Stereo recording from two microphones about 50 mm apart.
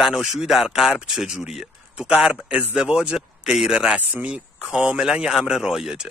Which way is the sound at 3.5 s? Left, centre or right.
Centre.